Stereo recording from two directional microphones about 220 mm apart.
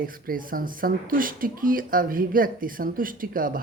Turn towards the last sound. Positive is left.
turn(degrees=-40)  # may be behind; listen again after turning